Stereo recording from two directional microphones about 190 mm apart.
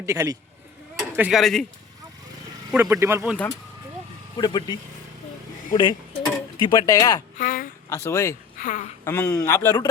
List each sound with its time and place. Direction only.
0.0 s speech: 15° right (ahead or behind); by 1.6 s centre (ahead or behind)
2.7 s speech: 10° right (ahead or behind)
4.4 s speech: 20° left (ahead or behind)
7.3 s a sound: 45° left (ahead or behind)
7.9 s speech: 15° left (ahead or behind)
8.5 s speech: 45° left (ahead or behind)
9.0 s speech: 10° left (ahead or behind)
9.5 s speech: 20° left (ahead or behind)